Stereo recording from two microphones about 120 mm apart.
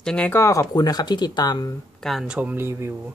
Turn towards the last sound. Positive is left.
turn(degrees=-20)  # may be behind; listen again after turning